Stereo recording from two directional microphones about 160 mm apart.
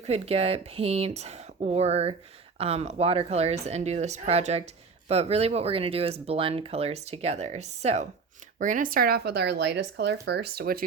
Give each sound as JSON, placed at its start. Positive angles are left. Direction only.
{"t": 0.0, "sound": "speech", "side_deg": -40}
{"t": 8.5, "sound": "speech", "side_deg": -55}